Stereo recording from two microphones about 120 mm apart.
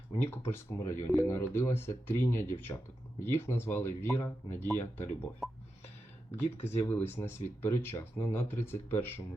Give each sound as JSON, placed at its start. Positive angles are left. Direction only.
{"t": 0.1, "sound": "speech", "side_deg": 20}
{"t": 6.4, "sound": "speech", "side_deg": 65}
{"t": 6.8, "sound": "speech", "side_deg": 15}